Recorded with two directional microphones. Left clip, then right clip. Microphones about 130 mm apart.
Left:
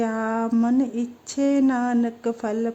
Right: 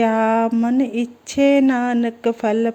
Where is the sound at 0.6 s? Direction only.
15° right (ahead or behind).